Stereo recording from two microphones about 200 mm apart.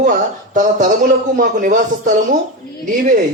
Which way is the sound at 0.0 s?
40° right (ahead or behind).